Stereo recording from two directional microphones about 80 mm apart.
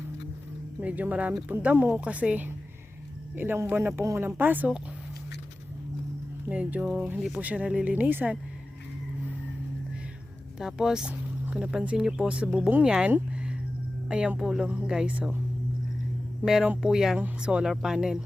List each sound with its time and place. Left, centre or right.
0.8 s a woman's voice: centre; by 4.3 s right
4.4 s a woman's voice: right
6.5 s a woman's voice: centre
10.6 s speech: centre
11.1 s vehicle: right
11.6 s speech: centre
16.4 s a woman's voice: centre
16.8 s speech: centre
17.2 s speech: centre